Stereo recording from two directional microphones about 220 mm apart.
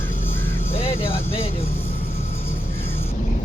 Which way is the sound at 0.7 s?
25° left (ahead or behind).